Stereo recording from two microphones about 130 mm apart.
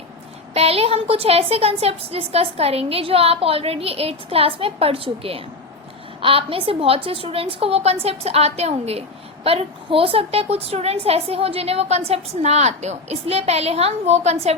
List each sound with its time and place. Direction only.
0.5 s a woman's voice: 50° right (ahead or behind)